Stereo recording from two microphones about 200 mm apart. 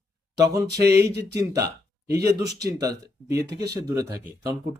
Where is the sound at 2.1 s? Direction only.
15° right (ahead or behind).